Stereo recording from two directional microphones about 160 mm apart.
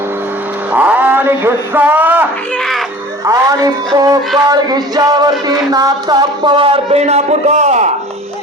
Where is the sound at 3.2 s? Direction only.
20° right (ahead or behind).